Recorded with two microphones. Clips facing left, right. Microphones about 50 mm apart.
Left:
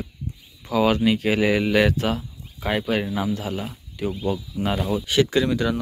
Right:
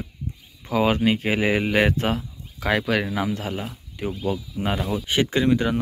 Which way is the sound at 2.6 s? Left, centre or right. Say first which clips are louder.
Right 1 dB; right.